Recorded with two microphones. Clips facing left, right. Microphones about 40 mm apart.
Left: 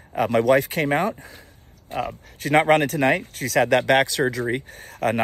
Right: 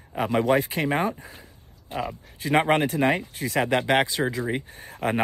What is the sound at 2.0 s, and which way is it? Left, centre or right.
Speech, left.